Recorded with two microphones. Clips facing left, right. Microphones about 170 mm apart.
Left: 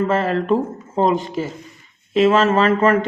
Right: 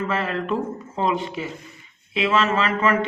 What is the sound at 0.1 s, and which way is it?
Speech, 45° left (ahead or behind).